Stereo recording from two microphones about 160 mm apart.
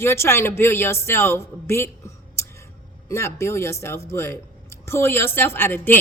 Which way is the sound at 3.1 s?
15° left (ahead or behind).